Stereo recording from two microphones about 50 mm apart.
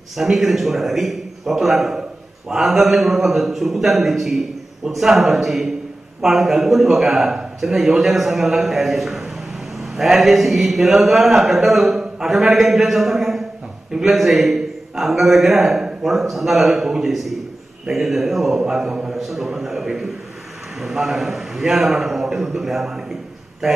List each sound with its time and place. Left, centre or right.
0.2 s a man's voice: centre